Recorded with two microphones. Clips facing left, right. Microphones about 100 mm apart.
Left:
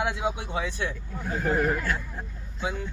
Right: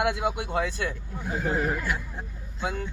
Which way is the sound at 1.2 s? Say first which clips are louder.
Left 2 dB; 5° right (ahead or behind).